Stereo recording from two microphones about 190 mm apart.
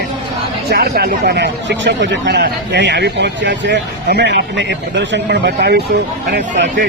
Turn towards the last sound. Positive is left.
turn(degrees=-60)  # may be behind; listen again after turning